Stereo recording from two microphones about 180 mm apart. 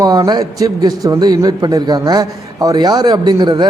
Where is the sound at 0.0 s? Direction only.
20° right (ahead or behind).